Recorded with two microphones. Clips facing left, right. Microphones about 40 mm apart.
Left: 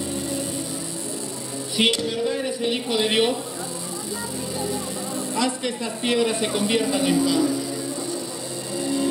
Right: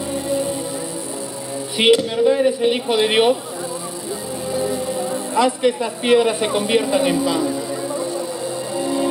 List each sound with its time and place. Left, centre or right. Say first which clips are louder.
0.1 s music: right 6 dB; right
1.8 s a man's voice: right 7 dB; centre
4.6 s speech: right 8 dB; centre
8.7 s music: right 3 dB; centre